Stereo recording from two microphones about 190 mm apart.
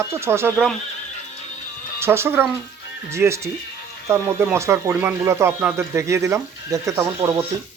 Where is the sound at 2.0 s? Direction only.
15° right (ahead or behind).